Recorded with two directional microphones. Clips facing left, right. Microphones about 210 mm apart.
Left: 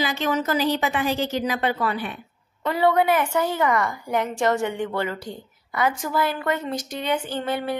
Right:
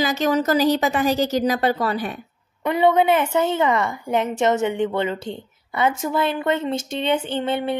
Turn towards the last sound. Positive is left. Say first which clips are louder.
# right 3 dB
turn(degrees=-25)  # may be behind; listen again after turning